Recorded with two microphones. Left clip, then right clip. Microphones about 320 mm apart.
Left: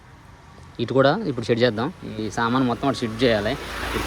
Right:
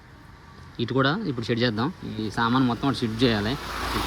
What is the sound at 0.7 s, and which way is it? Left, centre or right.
Speech, centre.